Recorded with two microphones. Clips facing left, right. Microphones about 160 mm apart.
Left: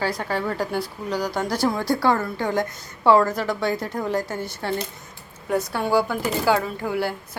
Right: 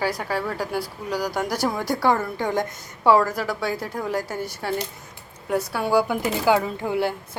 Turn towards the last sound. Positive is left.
turn(degrees=-20)  # may be behind; listen again after turning